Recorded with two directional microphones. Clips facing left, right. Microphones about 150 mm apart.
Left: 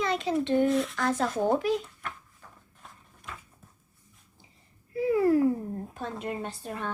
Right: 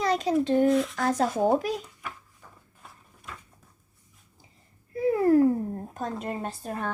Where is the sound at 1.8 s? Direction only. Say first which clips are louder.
Even; 5° right (ahead or behind).